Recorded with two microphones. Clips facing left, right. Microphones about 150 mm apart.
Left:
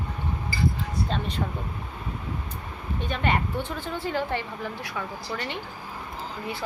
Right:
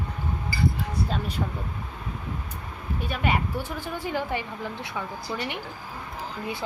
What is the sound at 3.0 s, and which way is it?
A woman's voice, 5° right (ahead or behind).